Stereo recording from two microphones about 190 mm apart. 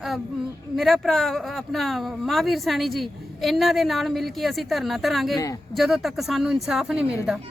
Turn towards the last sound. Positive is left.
turn(degrees=-5)  # may be behind; listen again after turning